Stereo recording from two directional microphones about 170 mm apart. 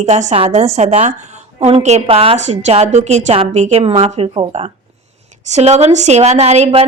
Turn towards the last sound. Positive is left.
turn(degrees=-40)  # may be behind; listen again after turning